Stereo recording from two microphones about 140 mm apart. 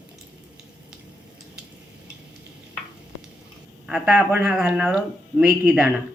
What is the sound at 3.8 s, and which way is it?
Speech, 5° right (ahead or behind).